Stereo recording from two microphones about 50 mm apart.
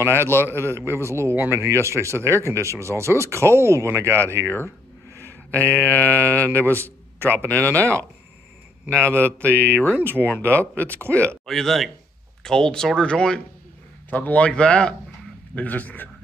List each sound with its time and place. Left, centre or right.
0.0 s a man's voice: right
4.4 s speech: left
5.5 s speech: left
8.9 s speech: left
11.4 s speech: centre
14.1 s speech: left
15.5 s speech: left